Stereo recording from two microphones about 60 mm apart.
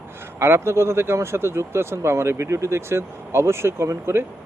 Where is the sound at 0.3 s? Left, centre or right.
Right.